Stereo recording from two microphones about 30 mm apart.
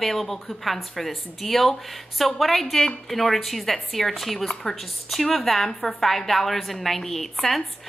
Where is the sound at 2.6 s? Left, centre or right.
Centre.